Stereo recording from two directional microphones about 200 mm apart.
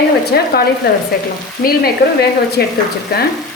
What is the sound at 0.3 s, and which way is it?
Speech, 50° left (ahead or behind).